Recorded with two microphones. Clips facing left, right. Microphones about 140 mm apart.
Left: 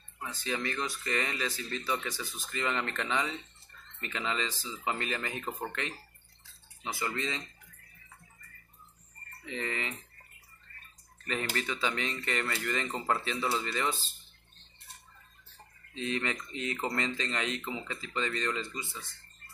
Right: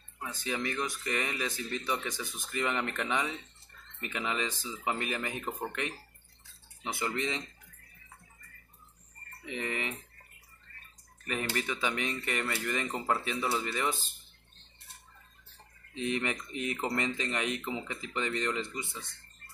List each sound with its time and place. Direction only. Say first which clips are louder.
0.2 s speech: even; 15° right (ahead or behind)
9.4 s speech: right 1 dB; 15° right (ahead or behind)
11.5 s speech: right 1 dB; 15° right (ahead or behind)
15.9 s speech: right 1 dB; 15° right (ahead or behind)